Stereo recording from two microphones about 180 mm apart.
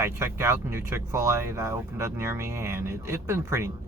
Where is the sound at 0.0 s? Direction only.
15° right (ahead or behind).